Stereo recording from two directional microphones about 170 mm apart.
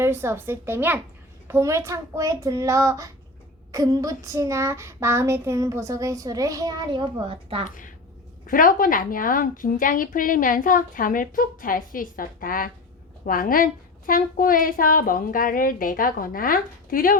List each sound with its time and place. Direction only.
0.0 s child singing: 15° right (ahead or behind); by 7.6 s 30° right (ahead or behind)
7.7 s a woman's voice: 50° left (ahead or behind)